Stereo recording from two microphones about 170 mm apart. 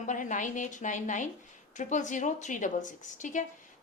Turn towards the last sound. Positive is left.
turn(degrees=50)  # may be behind; listen again after turning